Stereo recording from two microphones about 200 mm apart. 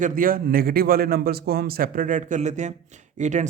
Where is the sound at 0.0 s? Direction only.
45° right (ahead or behind).